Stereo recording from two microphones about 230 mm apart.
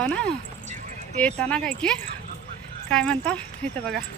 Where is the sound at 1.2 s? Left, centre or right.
Centre.